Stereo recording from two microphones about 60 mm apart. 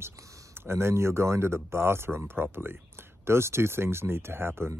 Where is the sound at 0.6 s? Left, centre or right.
Right.